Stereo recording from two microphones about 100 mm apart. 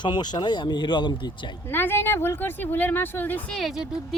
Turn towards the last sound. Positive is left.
turn(degrees=0)  # may be behind; listen again after turning